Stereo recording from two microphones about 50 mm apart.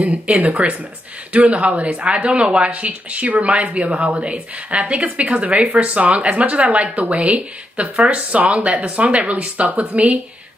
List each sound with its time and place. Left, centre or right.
0.3 s speech: right